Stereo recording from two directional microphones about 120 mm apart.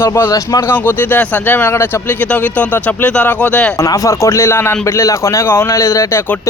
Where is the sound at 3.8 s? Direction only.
25° left (ahead or behind).